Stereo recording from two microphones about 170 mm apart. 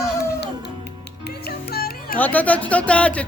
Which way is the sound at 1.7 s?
60° left (ahead or behind).